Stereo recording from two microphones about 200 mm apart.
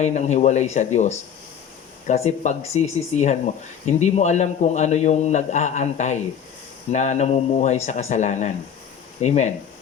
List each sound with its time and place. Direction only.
0.0 s speech: 35° left (ahead or behind)